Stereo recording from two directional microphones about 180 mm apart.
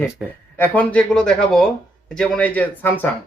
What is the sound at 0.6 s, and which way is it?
Speech, 10° left (ahead or behind).